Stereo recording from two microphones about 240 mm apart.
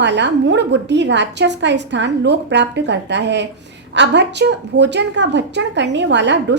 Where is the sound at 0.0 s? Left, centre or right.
Right.